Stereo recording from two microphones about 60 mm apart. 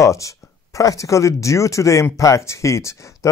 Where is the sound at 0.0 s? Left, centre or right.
Left.